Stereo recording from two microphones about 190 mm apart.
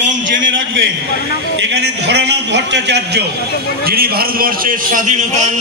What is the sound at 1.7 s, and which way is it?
A man's voice, 60° right (ahead or behind).